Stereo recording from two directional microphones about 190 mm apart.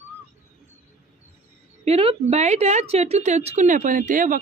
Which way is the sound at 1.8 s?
30° right (ahead or behind).